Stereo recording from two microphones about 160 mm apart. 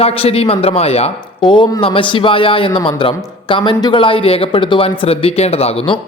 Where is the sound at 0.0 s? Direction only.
40° left (ahead or behind).